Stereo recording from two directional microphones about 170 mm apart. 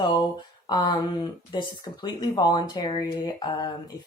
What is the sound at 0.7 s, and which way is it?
Speech, 25° left (ahead or behind).